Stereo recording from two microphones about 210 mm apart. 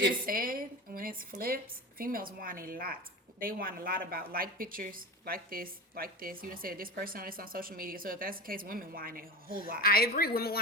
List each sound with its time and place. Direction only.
0.3 s a woman's voice: 40° right (ahead or behind)
9.8 s a woman's voice: 45° left (ahead or behind)